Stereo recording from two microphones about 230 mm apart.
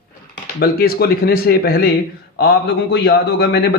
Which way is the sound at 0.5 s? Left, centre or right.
Left.